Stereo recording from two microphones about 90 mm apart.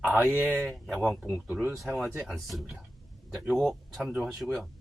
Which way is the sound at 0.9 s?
Centre (ahead or behind).